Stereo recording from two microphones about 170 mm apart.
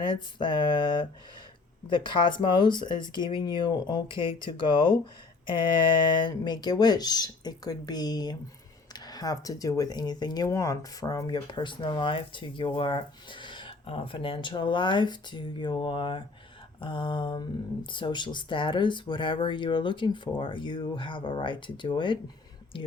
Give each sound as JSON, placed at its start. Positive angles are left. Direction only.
{"t": 0.1, "sound": "speech", "side_deg": 30}